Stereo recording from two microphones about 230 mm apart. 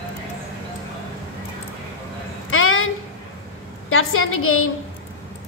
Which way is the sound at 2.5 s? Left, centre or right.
Left.